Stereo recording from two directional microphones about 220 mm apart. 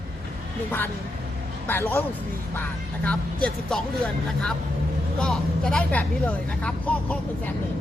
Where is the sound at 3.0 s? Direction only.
5° left (ahead or behind).